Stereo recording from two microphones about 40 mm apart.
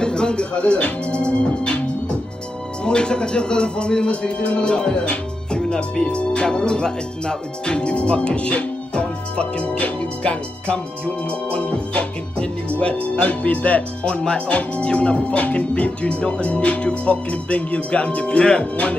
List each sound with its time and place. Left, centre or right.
0.0 s music: left
2.8 s speech: left
11.2 s music: left
13.1 s speech: left
18.4 s speech: centre